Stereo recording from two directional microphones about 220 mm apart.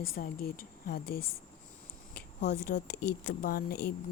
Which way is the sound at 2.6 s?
45° left (ahead or behind).